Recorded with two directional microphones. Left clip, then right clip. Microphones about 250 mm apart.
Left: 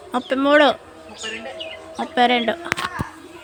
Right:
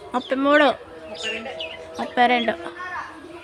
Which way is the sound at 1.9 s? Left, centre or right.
Centre.